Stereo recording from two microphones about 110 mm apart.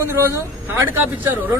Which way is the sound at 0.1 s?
25° right (ahead or behind).